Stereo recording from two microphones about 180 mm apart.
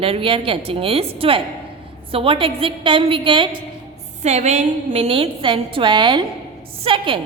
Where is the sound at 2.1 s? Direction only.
30° right (ahead or behind).